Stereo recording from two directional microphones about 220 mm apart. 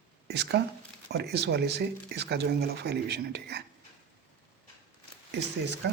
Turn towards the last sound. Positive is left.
turn(degrees=-50)  # may be behind; listen again after turning